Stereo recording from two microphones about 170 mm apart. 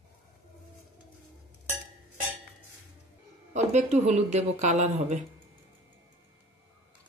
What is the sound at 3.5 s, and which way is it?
Speech, 40° right (ahead or behind).